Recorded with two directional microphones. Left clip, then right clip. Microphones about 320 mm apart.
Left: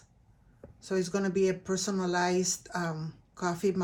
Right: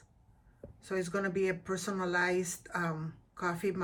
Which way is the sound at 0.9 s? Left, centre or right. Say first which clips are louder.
Left 3 dB; centre.